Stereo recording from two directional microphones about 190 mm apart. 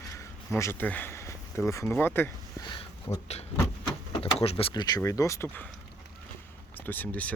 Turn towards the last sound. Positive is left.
turn(degrees=10)  # may be behind; listen again after turning